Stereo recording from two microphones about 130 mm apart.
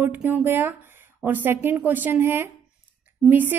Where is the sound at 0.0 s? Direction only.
15° right (ahead or behind).